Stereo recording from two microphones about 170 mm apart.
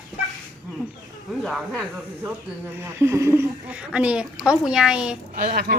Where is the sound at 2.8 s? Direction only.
15° right (ahead or behind).